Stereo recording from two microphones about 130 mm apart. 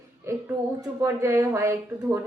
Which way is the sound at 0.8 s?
20° right (ahead or behind).